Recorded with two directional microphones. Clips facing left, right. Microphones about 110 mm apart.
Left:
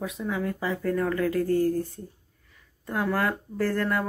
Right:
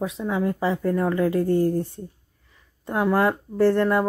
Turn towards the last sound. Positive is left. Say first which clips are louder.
# right 7 dB
turn(degrees=-25)  # may be behind; listen again after turning